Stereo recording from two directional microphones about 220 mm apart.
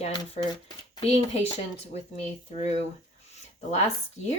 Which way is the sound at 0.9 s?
30° left (ahead or behind).